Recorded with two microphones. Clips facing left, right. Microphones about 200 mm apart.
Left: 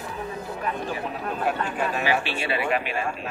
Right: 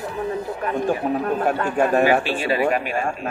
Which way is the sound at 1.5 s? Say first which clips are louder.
Right 6 dB; 50° right (ahead or behind).